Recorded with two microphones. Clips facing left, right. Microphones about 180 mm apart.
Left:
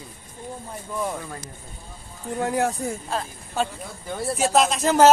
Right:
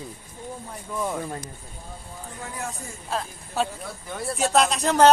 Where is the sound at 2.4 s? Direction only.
75° left (ahead or behind).